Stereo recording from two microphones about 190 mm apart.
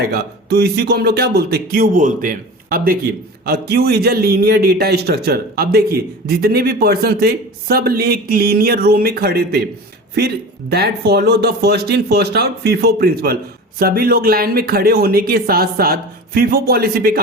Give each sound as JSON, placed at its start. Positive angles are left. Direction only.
{"t": 0.0, "sound": "a man's voice", "side_deg": -55}